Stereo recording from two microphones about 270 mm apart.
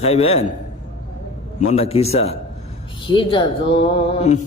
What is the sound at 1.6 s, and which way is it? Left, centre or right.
A man's voice, left.